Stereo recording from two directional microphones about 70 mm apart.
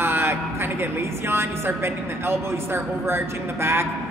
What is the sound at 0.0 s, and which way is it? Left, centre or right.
A woman's voice, right.